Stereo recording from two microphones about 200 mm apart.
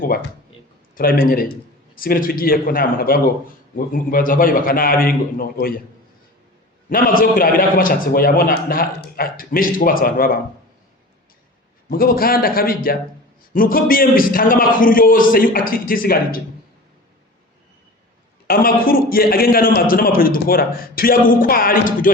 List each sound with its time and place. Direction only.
0.0 s a man's voice: 45° left (ahead or behind)
6.9 s a man's voice: 45° left (ahead or behind)
11.9 s a man's voice: 50° left (ahead or behind)
18.4 s a man's voice: 50° left (ahead or behind)